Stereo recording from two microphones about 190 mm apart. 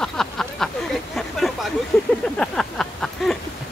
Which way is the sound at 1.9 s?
5° left (ahead or behind).